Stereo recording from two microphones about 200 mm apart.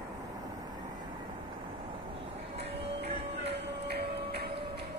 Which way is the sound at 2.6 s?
30° right (ahead or behind).